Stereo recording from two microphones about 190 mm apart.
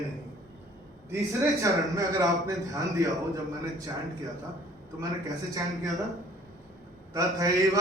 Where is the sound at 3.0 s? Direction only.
15° right (ahead or behind).